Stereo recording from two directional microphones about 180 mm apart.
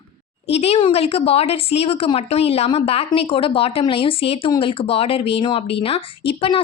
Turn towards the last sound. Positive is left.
turn(degrees=30)  # may be behind; listen again after turning